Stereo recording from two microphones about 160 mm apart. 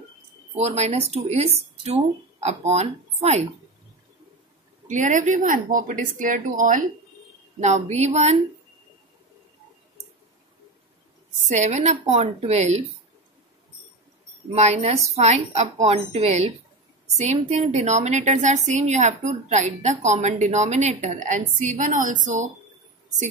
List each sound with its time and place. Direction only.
0.6 s speech: 40° right (ahead or behind)
4.8 s a woman's voice: 50° right (ahead or behind)
11.4 s a woman's voice: 50° right (ahead or behind)
14.5 s a woman's voice: 45° right (ahead or behind)